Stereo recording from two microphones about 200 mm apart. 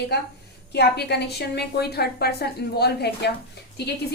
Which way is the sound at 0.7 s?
55° left (ahead or behind).